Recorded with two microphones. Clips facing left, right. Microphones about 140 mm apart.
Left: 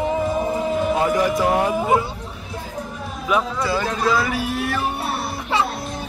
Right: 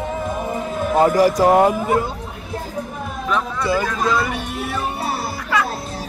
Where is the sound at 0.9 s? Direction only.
40° right (ahead or behind).